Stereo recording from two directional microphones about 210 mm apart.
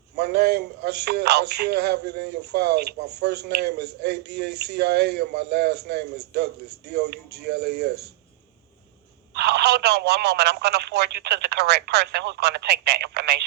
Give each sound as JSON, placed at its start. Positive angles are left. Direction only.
{"t": 0.2, "sound": "a man's voice", "side_deg": -50}
{"t": 9.3, "sound": "a man's voice", "side_deg": -50}